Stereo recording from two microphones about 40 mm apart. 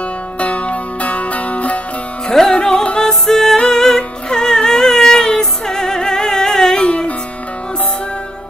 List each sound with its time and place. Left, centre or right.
0.4 s music: left
2.2 s music: centre
2.8 s music: left
3.1 s music: centre